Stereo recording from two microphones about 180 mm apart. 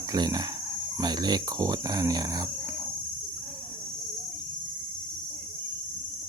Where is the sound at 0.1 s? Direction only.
20° right (ahead or behind).